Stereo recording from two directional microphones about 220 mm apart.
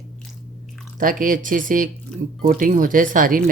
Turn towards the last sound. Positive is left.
turn(degrees=-35)  # may be behind; listen again after turning